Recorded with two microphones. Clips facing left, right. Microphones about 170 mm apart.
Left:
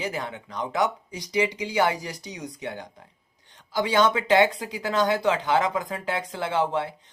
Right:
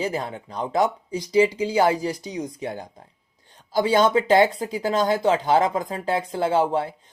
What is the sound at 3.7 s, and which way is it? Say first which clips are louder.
Speech: right 4 dB; 35° right (ahead or behind).